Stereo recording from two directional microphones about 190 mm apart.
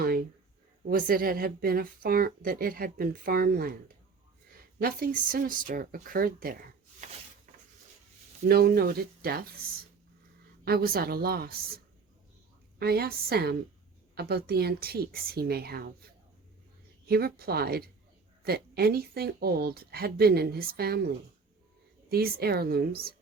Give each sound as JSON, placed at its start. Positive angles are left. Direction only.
{"t": 0.0, "sound": "a sound", "side_deg": -50}
{"t": 0.9, "sound": "a woman's voice", "side_deg": -50}
{"t": 4.8, "sound": "a woman's voice", "side_deg": -50}
{"t": 8.4, "sound": "a woman's voice", "side_deg": -55}
{"t": 10.7, "sound": "a woman's voice", "side_deg": -55}
{"t": 12.8, "sound": "speech", "side_deg": -55}
{"t": 17.1, "sound": "a woman's voice", "side_deg": -55}
{"t": 22.1, "sound": "speech", "side_deg": -55}